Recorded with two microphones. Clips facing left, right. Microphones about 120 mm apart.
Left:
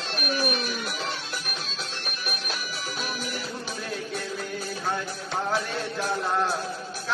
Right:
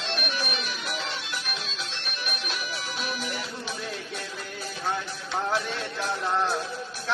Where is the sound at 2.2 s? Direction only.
45° left (ahead or behind).